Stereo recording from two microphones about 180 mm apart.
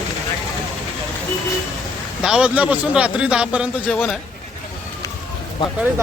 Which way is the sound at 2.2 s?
5° right (ahead or behind).